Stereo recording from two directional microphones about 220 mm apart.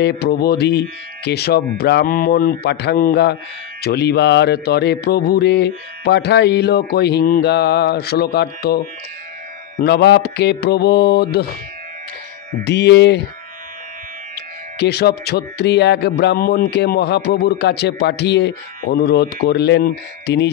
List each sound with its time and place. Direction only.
0.0 s speech: 45° left (ahead or behind)
12.6 s speech: 50° left (ahead or behind)
14.8 s speech: 50° left (ahead or behind)